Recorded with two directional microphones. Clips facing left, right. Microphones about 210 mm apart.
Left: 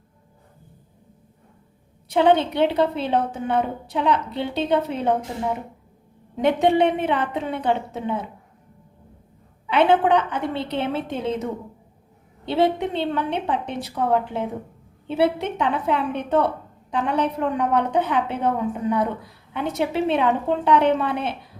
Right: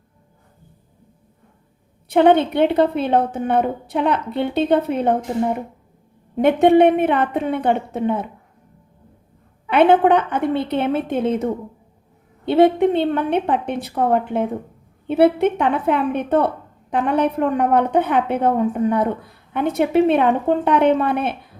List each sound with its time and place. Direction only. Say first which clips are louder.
2.0 s a woman's voice: right 4 dB; 55° right (ahead or behind)
6.3 s a woman's voice: right 6 dB; 55° right (ahead or behind)
9.6 s a woman's voice: right 4 dB; 55° right (ahead or behind)
12.5 s a woman's voice: right 7 dB; 55° right (ahead or behind)